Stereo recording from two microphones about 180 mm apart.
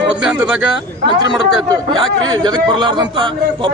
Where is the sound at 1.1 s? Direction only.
25° right (ahead or behind).